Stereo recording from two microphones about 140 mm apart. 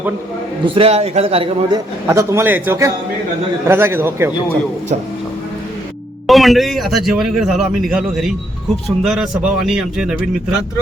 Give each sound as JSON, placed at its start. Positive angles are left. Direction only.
{"t": 0.6, "sound": "a man's voice", "side_deg": -40}
{"t": 1.7, "sound": "a man's voice", "side_deg": -20}
{"t": 6.2, "sound": "a man's voice", "side_deg": 0}